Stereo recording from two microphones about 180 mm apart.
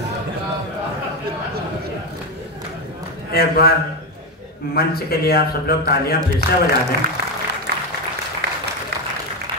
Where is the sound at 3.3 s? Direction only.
60° left (ahead or behind).